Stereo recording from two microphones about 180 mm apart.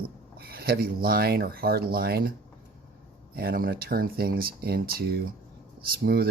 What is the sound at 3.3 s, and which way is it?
Speech, 55° right (ahead or behind).